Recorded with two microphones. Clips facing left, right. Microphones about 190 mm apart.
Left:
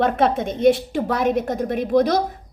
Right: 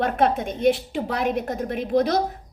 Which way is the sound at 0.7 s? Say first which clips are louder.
Left 4 dB; 50° left (ahead or behind).